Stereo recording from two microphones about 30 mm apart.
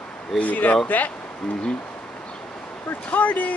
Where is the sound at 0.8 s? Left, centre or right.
Left.